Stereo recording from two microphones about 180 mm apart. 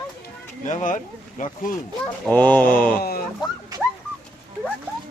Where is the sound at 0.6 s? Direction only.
45° left (ahead or behind).